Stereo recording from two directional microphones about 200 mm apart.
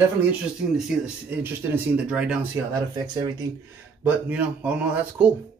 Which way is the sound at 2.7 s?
20° right (ahead or behind).